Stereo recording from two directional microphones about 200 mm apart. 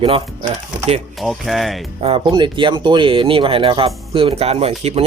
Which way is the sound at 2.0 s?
30° right (ahead or behind).